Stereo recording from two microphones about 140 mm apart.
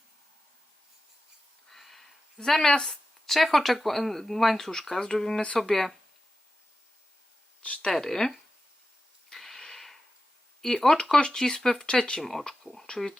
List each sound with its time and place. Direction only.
1.7 s a woman's voice: centre (ahead or behind)
7.6 s speech: 10° left (ahead or behind)
9.3 s a sound: centre (ahead or behind)
10.6 s speech: 5° left (ahead or behind)